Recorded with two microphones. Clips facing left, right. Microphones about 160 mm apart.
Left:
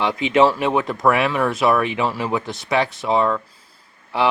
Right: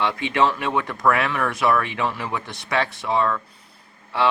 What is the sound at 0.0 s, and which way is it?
Speech, 20° left (ahead or behind).